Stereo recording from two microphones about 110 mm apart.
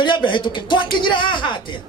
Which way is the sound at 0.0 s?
45° left (ahead or behind).